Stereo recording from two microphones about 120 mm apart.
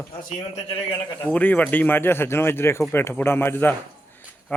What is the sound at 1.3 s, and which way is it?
A man's voice, 10° left (ahead or behind).